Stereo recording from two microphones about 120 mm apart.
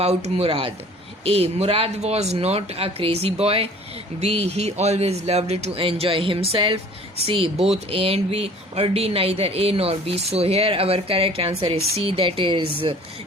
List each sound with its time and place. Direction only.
0.0 s speech: 60° right (ahead or behind); by 13.0 s 45° right (ahead or behind)